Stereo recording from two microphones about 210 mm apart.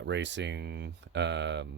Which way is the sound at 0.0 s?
55° right (ahead or behind).